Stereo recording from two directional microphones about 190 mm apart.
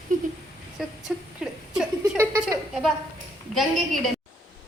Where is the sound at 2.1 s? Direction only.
15° right (ahead or behind).